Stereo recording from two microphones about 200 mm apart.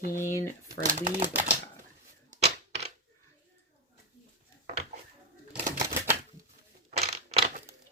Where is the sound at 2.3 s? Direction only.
35° right (ahead or behind).